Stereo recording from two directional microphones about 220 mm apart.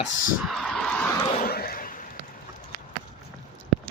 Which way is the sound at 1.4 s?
45° left (ahead or behind).